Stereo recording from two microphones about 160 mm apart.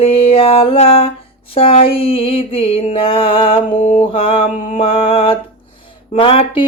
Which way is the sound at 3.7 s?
45° left (ahead or behind).